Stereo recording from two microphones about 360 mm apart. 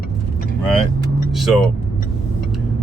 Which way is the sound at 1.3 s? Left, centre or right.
Centre.